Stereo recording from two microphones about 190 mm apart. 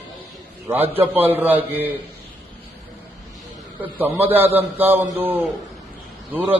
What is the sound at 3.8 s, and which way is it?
A man's voice, 10° right (ahead or behind).